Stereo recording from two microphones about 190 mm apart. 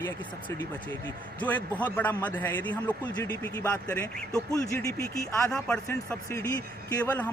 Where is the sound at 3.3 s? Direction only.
20° left (ahead or behind).